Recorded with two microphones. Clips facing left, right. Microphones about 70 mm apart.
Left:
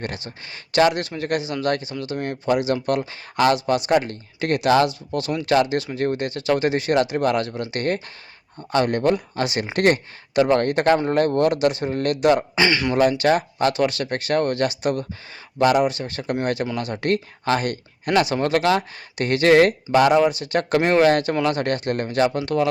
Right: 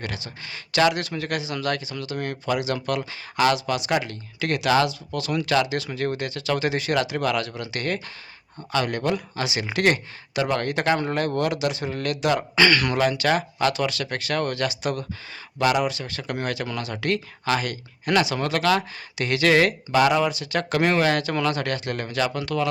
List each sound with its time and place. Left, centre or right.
0.0 s speech: left
12.3 s speech: left
13.0 s speech: left
18.2 s speech: left
19.1 s speech: left
22.5 s speech: left